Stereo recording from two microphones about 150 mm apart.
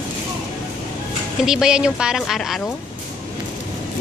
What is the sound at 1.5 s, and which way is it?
A woman's voice, 5° right (ahead or behind).